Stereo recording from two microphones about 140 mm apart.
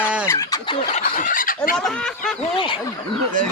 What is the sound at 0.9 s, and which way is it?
Fowl, 70° left (ahead or behind).